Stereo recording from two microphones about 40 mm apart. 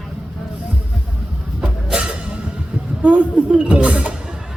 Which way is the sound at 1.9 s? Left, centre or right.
Right.